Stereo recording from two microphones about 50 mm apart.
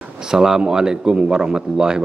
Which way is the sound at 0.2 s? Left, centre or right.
Centre.